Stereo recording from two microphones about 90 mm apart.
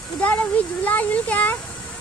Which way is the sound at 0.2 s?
15° left (ahead or behind).